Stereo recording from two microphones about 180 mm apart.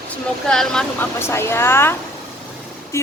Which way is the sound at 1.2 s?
15° left (ahead or behind).